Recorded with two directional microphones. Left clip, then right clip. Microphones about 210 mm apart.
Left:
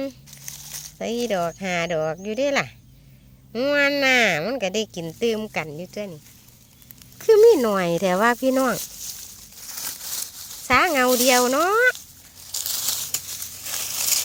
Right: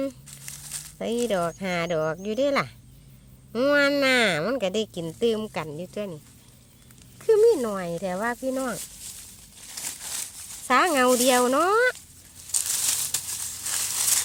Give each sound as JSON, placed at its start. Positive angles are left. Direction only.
{"t": 0.0, "sound": "speech", "side_deg": 0}
{"t": 7.2, "sound": "speech", "side_deg": 30}
{"t": 10.7, "sound": "speech", "side_deg": 5}
{"t": 13.7, "sound": "a sound", "side_deg": 0}